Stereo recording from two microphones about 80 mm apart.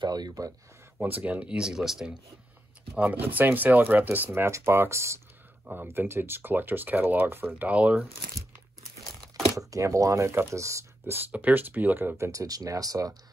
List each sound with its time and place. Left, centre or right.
0.0 s speech: right
1.0 s speech: centre
3.0 s speech: centre
4.3 s speech: right
5.7 s speech: right
9.6 s speech: right
11.1 s speech: right
12.3 s speech: right